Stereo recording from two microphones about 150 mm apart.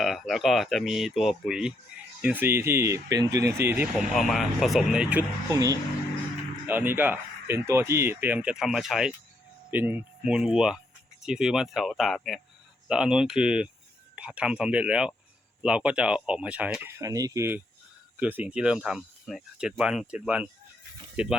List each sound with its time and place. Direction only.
0.0 s speech: centre (ahead or behind)
3.9 s speech: centre (ahead or behind)
5.5 s speech: 20° right (ahead or behind); by 21.3 s 5° right (ahead or behind)